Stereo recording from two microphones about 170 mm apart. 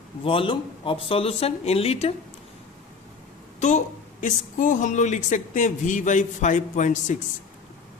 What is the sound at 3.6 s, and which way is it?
A man's voice, 45° left (ahead or behind).